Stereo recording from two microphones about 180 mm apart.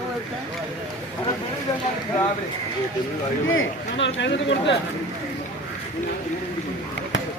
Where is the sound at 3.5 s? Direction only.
90° left.